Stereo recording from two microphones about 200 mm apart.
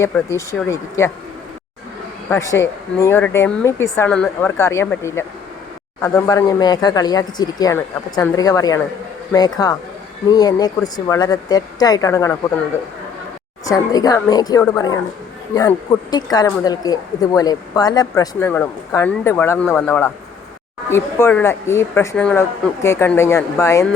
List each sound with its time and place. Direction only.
0.0 s speech: 15° left (ahead or behind)
2.3 s speech: 15° left (ahead or behind)
6.2 s a woman's voice: 20° left (ahead or behind)
13.7 s a woman's voice: 20° left (ahead or behind)